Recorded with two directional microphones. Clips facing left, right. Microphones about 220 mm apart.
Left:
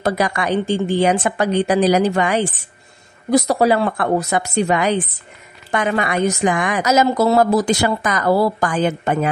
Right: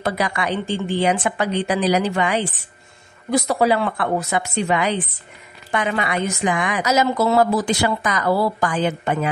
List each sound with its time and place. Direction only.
0.0 s a woman's voice: 45° left (ahead or behind)